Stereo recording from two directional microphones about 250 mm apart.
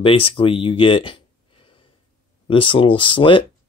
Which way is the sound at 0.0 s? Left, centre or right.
Left.